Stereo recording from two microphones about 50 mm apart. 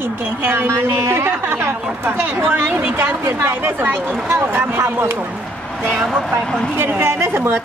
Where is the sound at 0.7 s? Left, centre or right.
Right.